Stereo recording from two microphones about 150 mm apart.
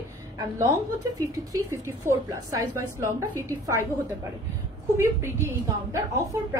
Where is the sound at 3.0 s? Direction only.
20° right (ahead or behind).